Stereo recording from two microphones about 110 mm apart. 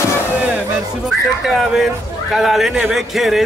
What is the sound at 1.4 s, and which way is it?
Speech, centre (ahead or behind).